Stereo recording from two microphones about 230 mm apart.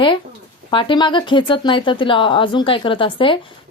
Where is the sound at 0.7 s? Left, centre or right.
Left.